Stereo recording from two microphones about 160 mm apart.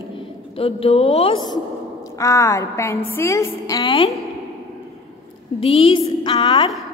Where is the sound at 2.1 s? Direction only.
20° left (ahead or behind).